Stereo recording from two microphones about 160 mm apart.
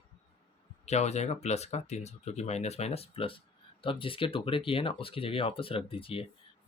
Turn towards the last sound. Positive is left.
turn(degrees=35)  # may be behind; listen again after turning